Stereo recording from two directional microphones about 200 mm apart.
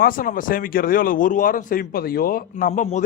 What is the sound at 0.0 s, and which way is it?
Speech, 45° left (ahead or behind).